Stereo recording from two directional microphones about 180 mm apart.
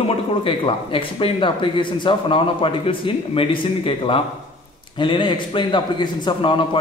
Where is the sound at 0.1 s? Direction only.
30° left (ahead or behind).